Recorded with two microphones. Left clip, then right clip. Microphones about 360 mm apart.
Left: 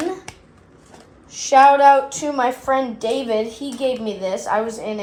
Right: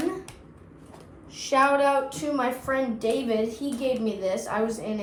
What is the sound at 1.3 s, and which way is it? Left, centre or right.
A woman's voice, centre.